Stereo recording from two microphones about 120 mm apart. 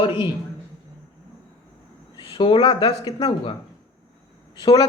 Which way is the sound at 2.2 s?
40° left (ahead or behind).